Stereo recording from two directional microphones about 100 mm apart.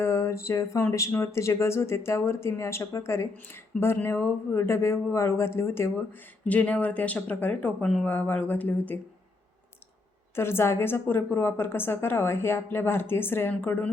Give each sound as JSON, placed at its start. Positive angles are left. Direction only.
{"t": 0.0, "sound": "speech", "side_deg": 30}
{"t": 6.4, "sound": "speech", "side_deg": 15}
{"t": 10.3, "sound": "speech", "side_deg": 25}